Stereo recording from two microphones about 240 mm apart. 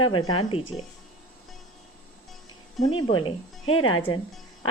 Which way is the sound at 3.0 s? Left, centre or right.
Centre.